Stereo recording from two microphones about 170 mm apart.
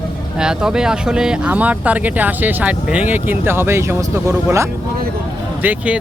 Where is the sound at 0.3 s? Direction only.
5° right (ahead or behind).